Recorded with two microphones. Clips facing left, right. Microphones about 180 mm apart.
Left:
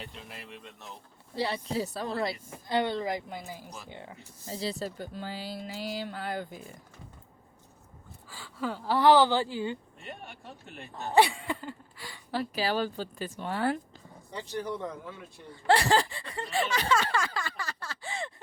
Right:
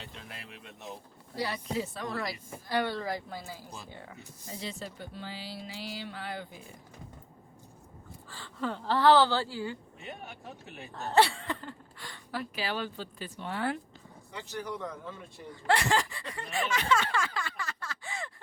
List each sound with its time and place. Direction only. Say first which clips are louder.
0.1 s speech: left 2 dB; centre (ahead or behind)
1.4 s a woman's voice: left 2 dB; 30° left (ahead or behind)
4.4 s speech: left 6 dB; 35° left (ahead or behind)
8.3 s speech: left 1 dB; 10° left (ahead or behind)
10.0 s speech: right 1 dB; centre (ahead or behind)
11.1 s a sound: left 2 dB; 15° left (ahead or behind)
12.3 s speech: left 5 dB; 35° left (ahead or behind)
15.0 s speech: even; 5° left (ahead or behind)
15.6 s speech: left 4 dB; 35° left (ahead or behind)